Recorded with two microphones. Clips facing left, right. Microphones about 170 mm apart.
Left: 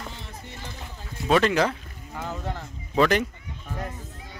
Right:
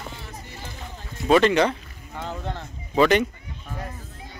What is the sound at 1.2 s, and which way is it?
Speech, centre (ahead or behind).